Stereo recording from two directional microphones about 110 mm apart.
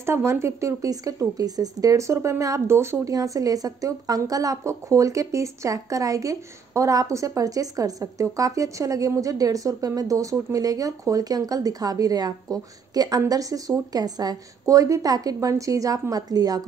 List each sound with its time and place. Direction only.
0.0 s speech: 25° right (ahead or behind)